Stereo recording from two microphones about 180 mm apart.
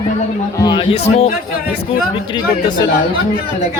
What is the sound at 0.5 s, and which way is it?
Speech, 25° left (ahead or behind).